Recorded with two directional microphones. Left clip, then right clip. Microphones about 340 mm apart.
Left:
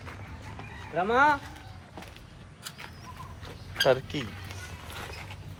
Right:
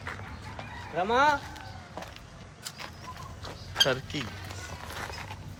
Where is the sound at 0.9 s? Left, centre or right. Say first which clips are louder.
Left 1 dB; left.